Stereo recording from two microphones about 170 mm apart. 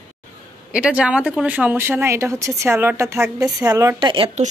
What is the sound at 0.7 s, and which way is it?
Speech, 5° right (ahead or behind).